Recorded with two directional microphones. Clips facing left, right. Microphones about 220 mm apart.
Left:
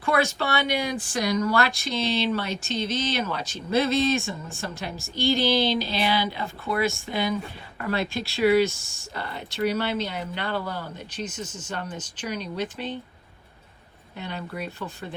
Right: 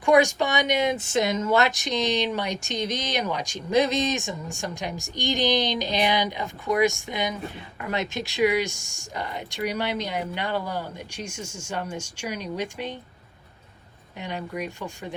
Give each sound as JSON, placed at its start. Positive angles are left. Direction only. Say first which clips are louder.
{"t": 0.0, "sound": "speech", "louder": "right 5 dB", "side_deg": -15}
{"t": 14.2, "sound": "speech", "louder": "right 2 dB", "side_deg": -15}